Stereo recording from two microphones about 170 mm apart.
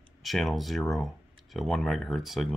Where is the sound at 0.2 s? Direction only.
Centre (ahead or behind).